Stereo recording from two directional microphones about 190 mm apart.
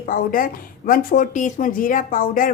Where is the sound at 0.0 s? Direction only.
50° left (ahead or behind).